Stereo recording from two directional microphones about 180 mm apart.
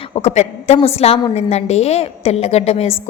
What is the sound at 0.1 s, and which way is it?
A woman's voice, 35° left (ahead or behind).